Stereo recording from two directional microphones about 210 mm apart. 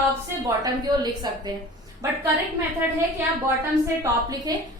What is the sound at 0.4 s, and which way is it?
Speech, 20° right (ahead or behind).